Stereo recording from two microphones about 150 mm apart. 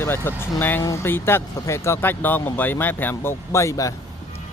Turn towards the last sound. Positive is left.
turn(degrees=20)  # may be behind; listen again after turning